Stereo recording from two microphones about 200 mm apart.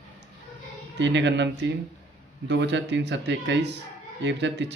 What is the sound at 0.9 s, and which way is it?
Speech, 60° right (ahead or behind).